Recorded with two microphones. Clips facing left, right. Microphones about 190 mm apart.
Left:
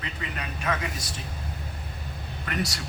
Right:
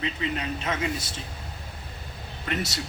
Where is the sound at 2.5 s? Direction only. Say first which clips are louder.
Right 1 dB; 25° right (ahead or behind).